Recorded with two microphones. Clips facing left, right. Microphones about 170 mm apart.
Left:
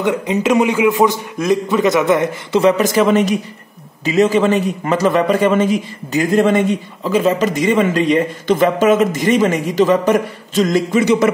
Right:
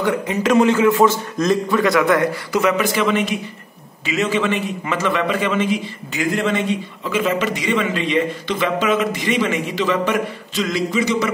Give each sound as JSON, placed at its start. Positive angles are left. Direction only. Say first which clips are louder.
{"t": 0.0, "sound": "a man's voice", "louder": "left 3 dB", "side_deg": 20}
{"t": 2.8, "sound": "a man's voice", "louder": "left 5 dB", "side_deg": 40}